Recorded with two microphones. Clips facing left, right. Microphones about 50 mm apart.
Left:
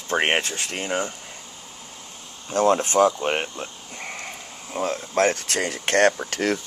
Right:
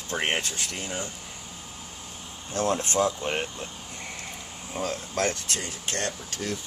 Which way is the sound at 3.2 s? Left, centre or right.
Left.